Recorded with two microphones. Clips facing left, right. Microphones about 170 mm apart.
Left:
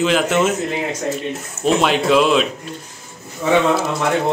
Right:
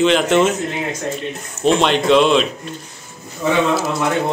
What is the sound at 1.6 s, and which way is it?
Speech, 5° left (ahead or behind).